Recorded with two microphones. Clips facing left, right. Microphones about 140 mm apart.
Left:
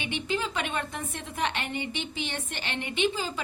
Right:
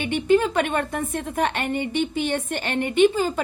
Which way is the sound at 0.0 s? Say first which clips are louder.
Right 12 dB; 50° right (ahead or behind).